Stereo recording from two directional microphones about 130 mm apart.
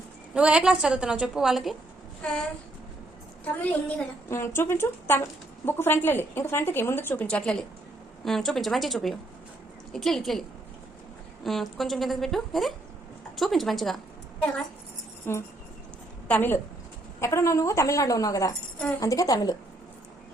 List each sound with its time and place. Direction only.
0.3 s a woman's voice: 10° right (ahead or behind)
3.4 s a woman's voice: 10° left (ahead or behind)
11.4 s a woman's voice: centre (ahead or behind)
15.3 s a woman's voice: 15° left (ahead or behind)